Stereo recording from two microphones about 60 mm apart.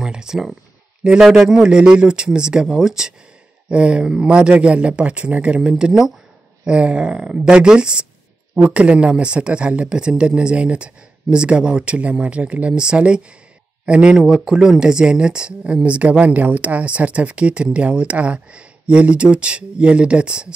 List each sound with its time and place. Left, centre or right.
0.0 s speech: centre